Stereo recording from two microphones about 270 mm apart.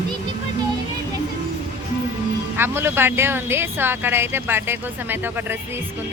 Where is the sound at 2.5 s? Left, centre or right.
Centre.